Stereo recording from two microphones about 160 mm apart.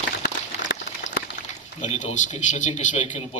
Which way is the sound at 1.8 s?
45° left (ahead or behind).